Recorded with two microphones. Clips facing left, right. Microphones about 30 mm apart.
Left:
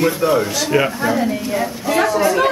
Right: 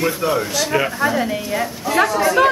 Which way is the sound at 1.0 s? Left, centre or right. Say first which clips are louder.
Left 1 dB; centre.